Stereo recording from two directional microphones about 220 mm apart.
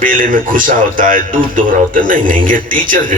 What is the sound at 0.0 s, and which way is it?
A man's voice, 40° right (ahead or behind).